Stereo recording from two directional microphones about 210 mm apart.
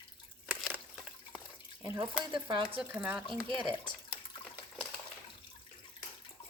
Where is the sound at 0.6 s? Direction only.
5° right (ahead or behind).